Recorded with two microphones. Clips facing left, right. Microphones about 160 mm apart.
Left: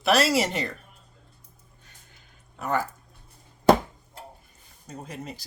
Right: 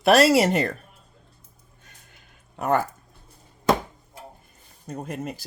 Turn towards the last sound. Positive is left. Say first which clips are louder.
# right 6 dB
turn(degrees=-55)  # may be behind; listen again after turning